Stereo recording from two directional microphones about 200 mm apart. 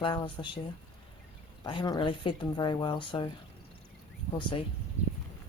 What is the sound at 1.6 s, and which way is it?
Speech, 20° left (ahead or behind).